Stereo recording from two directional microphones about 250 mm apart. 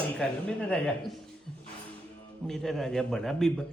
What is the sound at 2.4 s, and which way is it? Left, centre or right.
Speech, centre.